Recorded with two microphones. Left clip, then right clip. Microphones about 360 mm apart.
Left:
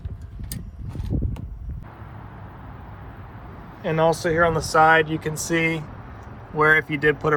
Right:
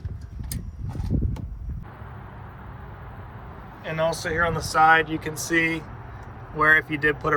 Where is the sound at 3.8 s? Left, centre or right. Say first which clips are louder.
Left 5 dB; centre.